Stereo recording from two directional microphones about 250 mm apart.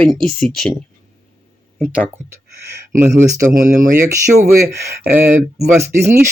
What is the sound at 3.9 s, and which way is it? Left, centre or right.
Speech, centre.